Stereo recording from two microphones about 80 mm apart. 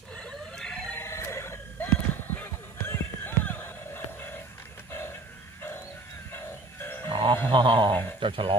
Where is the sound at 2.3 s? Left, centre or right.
Left.